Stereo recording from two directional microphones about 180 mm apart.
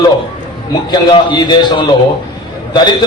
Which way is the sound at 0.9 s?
25° left (ahead or behind).